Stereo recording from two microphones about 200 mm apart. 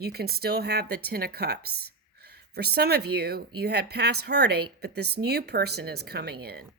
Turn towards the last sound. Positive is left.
turn(degrees=-50)  # may be behind; listen again after turning